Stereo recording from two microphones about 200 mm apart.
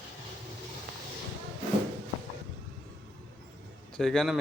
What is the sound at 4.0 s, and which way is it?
Speech, centre (ahead or behind).